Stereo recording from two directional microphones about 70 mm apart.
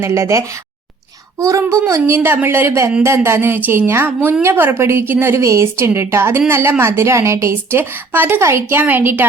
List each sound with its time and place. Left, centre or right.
0.0 s a child's voice: right
2.0 s a woman's voice: right
8.8 s a woman's voice: right